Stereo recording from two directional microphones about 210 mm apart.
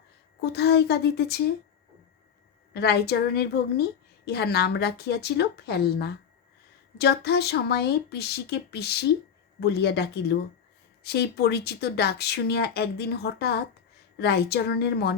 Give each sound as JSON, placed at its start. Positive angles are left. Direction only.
{"t": 0.4, "sound": "speech", "side_deg": 50}
{"t": 2.7, "sound": "speech", "side_deg": 50}